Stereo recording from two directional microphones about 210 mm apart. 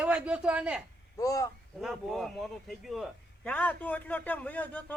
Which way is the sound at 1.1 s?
15° left (ahead or behind).